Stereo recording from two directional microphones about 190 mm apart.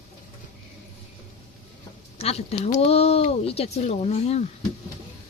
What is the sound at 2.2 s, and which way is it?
Speech, 35° left (ahead or behind).